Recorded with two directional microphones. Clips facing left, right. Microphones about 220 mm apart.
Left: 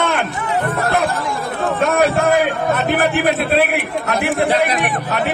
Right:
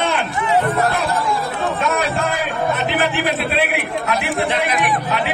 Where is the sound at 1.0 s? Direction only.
50° left (ahead or behind).